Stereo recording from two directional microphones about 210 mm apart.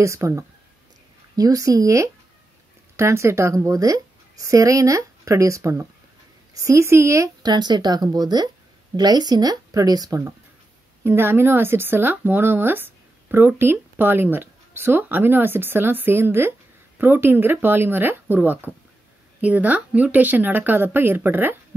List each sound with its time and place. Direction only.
0.0 s speech: 15° right (ahead or behind)